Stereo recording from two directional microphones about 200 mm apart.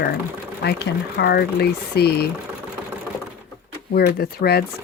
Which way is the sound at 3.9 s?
50° left (ahead or behind).